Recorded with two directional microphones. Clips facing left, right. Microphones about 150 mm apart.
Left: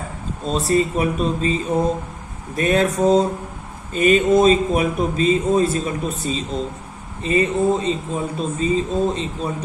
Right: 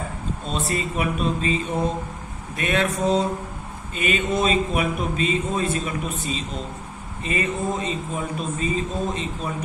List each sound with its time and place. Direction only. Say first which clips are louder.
0.4 s a man's voice: left 9 dB; 35° left (ahead or behind)